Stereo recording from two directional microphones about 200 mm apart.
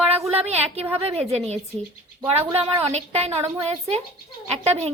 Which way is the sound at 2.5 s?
30° right (ahead or behind).